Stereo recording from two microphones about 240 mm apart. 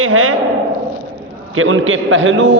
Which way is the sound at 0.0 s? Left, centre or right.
Right.